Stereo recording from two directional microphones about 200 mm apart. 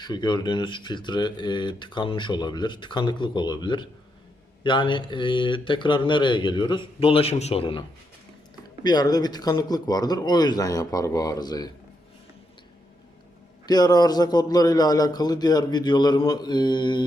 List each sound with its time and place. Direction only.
0.0 s speech: 20° left (ahead or behind)
13.7 s speech: 20° left (ahead or behind)